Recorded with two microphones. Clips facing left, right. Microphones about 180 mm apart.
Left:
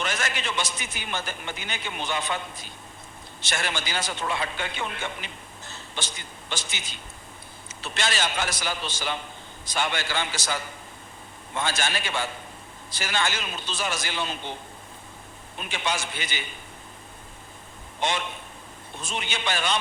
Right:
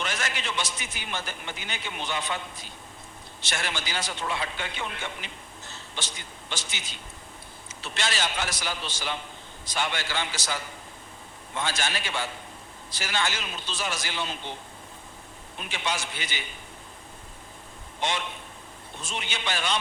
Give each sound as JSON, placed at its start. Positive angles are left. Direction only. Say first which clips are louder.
{"t": 0.0, "sound": "a man's voice", "louder": "left 2 dB", "side_deg": 50}
{"t": 3.4, "sound": "a man's voice", "louder": "left 2 dB", "side_deg": 50}
{"t": 7.9, "sound": "a man's voice", "louder": "left 2 dB", "side_deg": 50}
{"t": 15.7, "sound": "a man's voice", "louder": "left 2 dB", "side_deg": 50}
{"t": 18.0, "sound": "a man's voice", "louder": "left 2 dB", "side_deg": 50}